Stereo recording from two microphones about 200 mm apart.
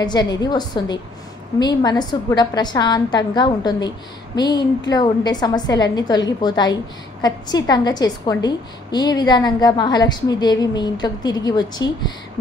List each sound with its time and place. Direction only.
0.0 s a woman's voice: 20° left (ahead or behind)